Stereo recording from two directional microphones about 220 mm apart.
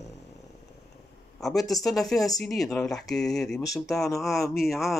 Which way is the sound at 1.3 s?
Centre (ahead or behind).